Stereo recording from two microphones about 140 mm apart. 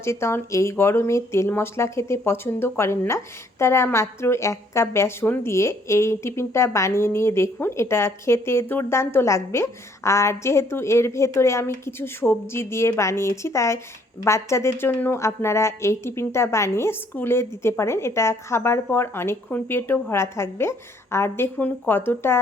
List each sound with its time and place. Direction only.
0.0 s a woman's voice: 20° left (ahead or behind)